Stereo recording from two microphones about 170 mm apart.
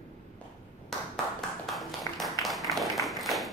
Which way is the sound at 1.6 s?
Centre (ahead or behind).